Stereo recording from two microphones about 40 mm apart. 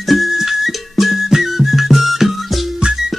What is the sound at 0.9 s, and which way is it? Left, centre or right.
Whistle, centre.